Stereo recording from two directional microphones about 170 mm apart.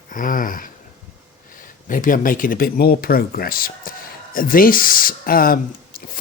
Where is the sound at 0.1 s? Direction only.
50° left (ahead or behind).